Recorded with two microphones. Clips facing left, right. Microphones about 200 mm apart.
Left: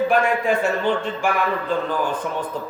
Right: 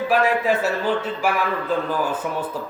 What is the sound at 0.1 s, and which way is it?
A man's voice, 5° right (ahead or behind).